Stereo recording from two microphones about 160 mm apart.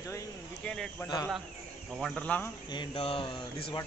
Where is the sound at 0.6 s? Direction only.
5° left (ahead or behind).